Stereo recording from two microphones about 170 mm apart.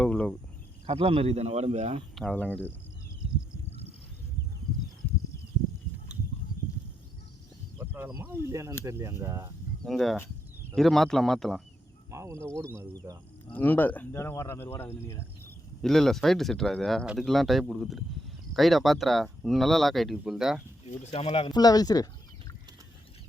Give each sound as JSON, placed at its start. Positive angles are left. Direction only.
{"t": 0.0, "sound": "cricket", "side_deg": 5}
{"t": 0.9, "sound": "speech", "side_deg": -30}
{"t": 2.1, "sound": "speech", "side_deg": 5}
{"t": 6.1, "sound": "a sound", "side_deg": -5}
{"t": 7.8, "sound": "speech", "side_deg": -15}
{"t": 9.8, "sound": "speech", "side_deg": 0}
{"t": 12.1, "sound": "speech", "side_deg": -15}
{"t": 13.5, "sound": "speech", "side_deg": 10}
{"t": 15.8, "sound": "speech", "side_deg": 0}
{"t": 20.8, "sound": "speech", "side_deg": 40}
{"t": 21.5, "sound": "speech", "side_deg": 20}